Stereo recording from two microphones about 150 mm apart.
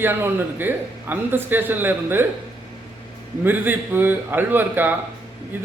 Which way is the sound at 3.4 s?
10° right (ahead or behind).